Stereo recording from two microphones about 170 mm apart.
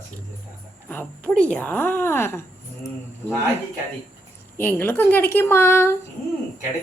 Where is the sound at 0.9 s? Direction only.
10° left (ahead or behind).